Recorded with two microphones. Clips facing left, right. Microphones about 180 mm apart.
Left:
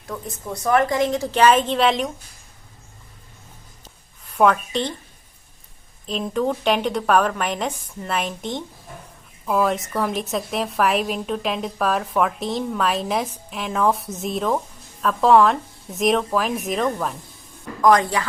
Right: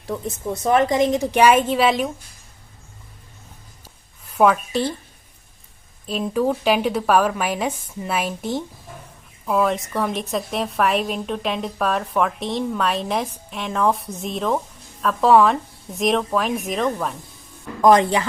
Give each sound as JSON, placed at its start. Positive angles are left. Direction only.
{"t": 0.1, "sound": "a woman's voice", "side_deg": -20}
{"t": 3.8, "sound": "a sound", "side_deg": -5}
{"t": 6.1, "sound": "a woman's voice", "side_deg": -5}
{"t": 17.8, "sound": "speech", "side_deg": -25}